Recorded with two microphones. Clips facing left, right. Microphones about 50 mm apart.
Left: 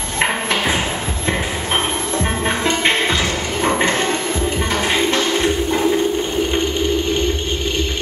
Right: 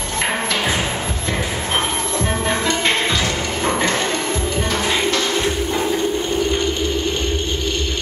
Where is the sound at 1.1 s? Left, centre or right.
Left.